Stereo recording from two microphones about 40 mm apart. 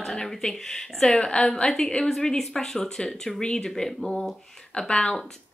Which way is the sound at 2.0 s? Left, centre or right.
Centre.